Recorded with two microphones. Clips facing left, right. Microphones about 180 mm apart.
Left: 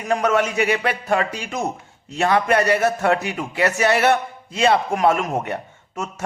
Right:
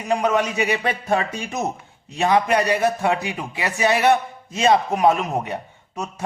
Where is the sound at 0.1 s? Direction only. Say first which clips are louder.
Left 1 dB; 15° right (ahead or behind).